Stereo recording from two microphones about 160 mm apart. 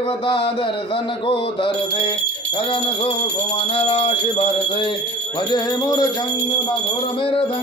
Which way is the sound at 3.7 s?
40° left (ahead or behind).